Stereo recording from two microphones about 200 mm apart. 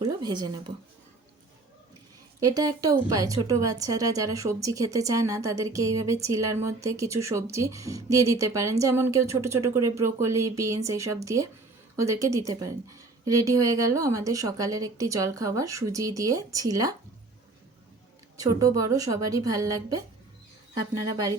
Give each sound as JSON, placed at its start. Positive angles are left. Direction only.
{"t": 0.0, "sound": "speech", "side_deg": -20}
{"t": 2.4, "sound": "a woman's voice", "side_deg": -20}
{"t": 18.3, "sound": "a woman's voice", "side_deg": -15}